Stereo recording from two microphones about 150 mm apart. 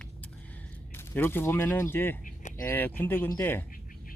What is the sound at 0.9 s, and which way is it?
Speech, 15° left (ahead or behind).